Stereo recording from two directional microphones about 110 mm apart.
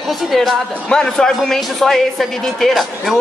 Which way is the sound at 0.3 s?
Centre (ahead or behind).